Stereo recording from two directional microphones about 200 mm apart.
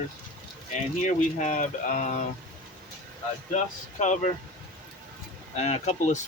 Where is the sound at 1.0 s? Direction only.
35° left (ahead or behind).